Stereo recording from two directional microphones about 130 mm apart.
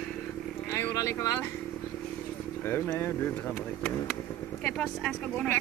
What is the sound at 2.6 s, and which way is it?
Speech, 15° left (ahead or behind).